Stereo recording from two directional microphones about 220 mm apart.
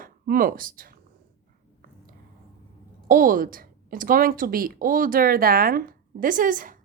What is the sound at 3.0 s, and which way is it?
A woman's voice, 35° right (ahead or behind).